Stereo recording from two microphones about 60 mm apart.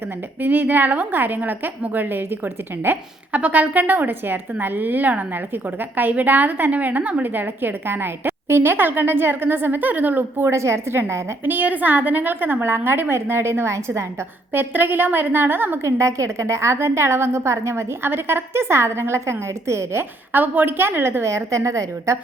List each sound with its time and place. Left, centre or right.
0.4 s a woman's voice: right
10.5 s a woman's voice: right
14.5 s a woman's voice: right
15.8 s a woman's voice: right
20.3 s a woman's voice: right